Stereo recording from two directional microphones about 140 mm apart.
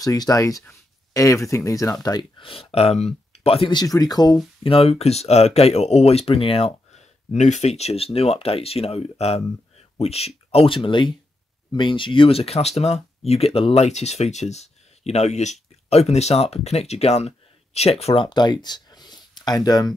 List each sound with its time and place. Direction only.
0.0 s speech: 25° left (ahead or behind)
3.8 s speech: 25° left (ahead or behind)
4.6 s speech: 45° left (ahead or behind)
7.3 s speech: 55° left (ahead or behind); by 19.9 s 30° left (ahead or behind)